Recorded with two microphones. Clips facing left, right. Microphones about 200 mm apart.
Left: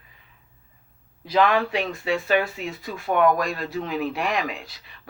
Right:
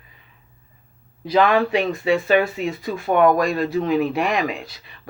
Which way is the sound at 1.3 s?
5° right (ahead or behind).